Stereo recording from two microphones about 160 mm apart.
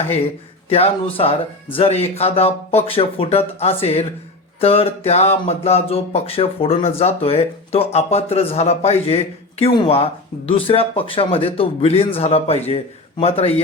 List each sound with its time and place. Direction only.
0.7 s speech: 40° left (ahead or behind)